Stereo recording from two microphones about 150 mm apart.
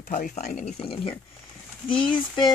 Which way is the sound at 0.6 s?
35° left (ahead or behind).